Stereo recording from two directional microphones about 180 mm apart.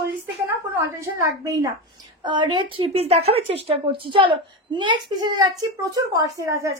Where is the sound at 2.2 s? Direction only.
25° right (ahead or behind).